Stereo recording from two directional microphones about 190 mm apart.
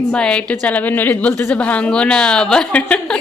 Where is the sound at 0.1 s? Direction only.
5° left (ahead or behind).